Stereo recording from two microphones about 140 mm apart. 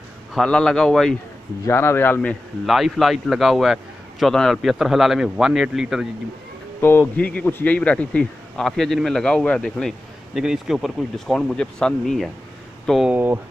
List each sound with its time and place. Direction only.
0.3 s speech: 5° left (ahead or behind)
1.7 s speech: 15° left (ahead or behind)
2.6 s speech: centre (ahead or behind)
6.8 s speech: 15° left (ahead or behind)
13.1 s speech: 15° right (ahead or behind)